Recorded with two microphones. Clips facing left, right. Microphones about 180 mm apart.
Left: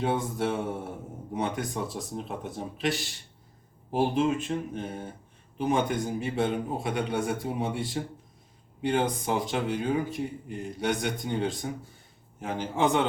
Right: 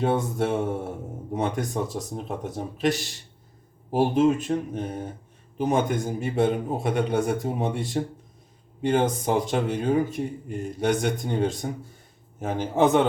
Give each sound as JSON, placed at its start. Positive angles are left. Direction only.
{"t": 0.0, "sound": "speech", "side_deg": -50}
{"t": 3.9, "sound": "speech", "side_deg": -40}